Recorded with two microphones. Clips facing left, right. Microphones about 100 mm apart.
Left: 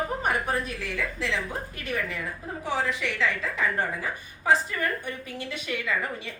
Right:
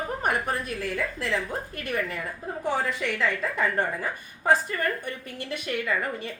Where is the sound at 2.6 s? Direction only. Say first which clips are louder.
Right 1 dB; 50° right (ahead or behind).